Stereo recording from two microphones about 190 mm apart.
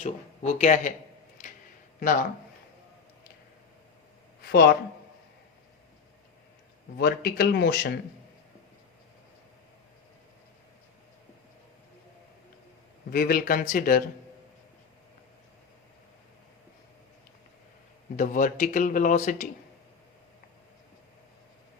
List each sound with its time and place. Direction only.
0.0 s speech: 40° left (ahead or behind)
4.4 s speech: 55° left (ahead or behind)
7.0 s speech: 55° left (ahead or behind)
13.1 s speech: 50° left (ahead or behind)
18.2 s speech: 45° left (ahead or behind)